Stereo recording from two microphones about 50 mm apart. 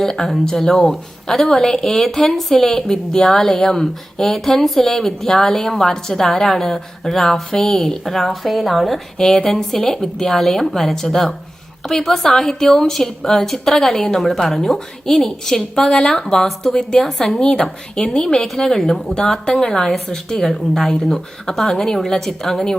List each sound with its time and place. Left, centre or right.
0.0 s a woman's voice: centre
19.0 s a woman's voice: centre